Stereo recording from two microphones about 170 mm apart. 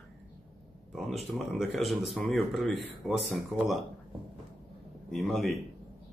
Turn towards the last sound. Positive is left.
turn(degrees=0)  # may be behind; listen again after turning